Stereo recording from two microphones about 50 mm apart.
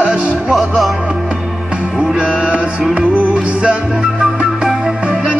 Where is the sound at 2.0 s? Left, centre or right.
Right.